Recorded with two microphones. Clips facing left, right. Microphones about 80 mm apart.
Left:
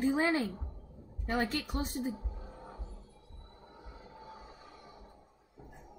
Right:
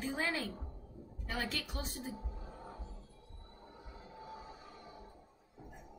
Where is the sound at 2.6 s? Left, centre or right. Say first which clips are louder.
Left 1 dB; left.